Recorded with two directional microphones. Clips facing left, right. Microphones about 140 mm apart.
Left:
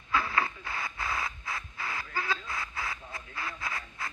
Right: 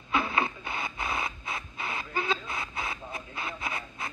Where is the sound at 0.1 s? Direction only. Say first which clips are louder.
Right 2 dB; 20° right (ahead or behind).